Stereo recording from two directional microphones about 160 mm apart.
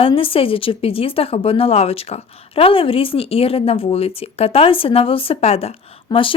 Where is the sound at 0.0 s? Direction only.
35° left (ahead or behind).